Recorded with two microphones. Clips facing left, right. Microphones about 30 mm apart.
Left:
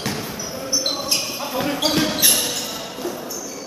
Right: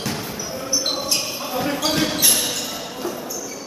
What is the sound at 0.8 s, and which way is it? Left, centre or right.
Basketball bounce, centre.